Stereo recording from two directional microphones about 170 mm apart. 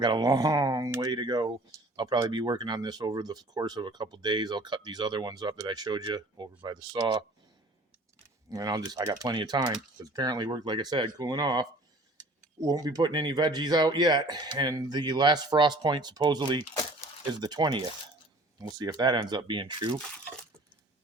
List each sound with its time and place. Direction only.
0.0 s speech: 25° right (ahead or behind)
8.4 s speech: 20° right (ahead or behind)